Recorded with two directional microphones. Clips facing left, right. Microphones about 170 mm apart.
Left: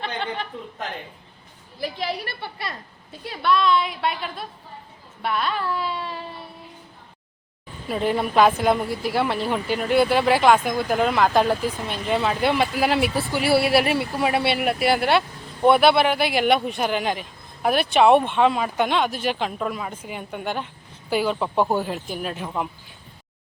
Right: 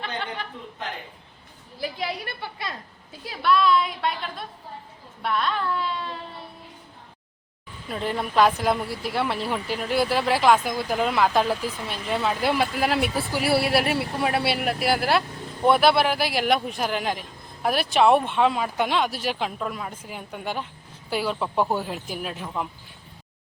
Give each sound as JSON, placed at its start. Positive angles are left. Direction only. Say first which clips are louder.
{"t": 1.8, "sound": "speech", "louder": "left 2 dB", "side_deg": 0}
{"t": 3.2, "sound": "speech", "louder": "even", "side_deg": 0}
{"t": 7.9, "sound": "speech", "louder": "left 5 dB", "side_deg": 5}